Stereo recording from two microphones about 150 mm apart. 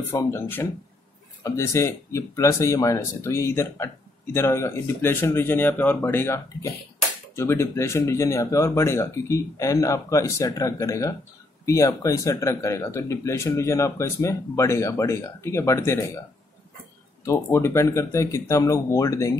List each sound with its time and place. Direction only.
0.1 s speech: 15° left (ahead or behind)
17.2 s speech: 20° left (ahead or behind)